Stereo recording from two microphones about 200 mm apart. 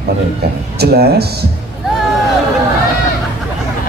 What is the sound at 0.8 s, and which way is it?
Speech, 50° right (ahead or behind).